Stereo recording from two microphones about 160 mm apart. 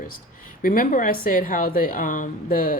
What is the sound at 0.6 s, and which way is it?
A woman's voice, 60° left (ahead or behind).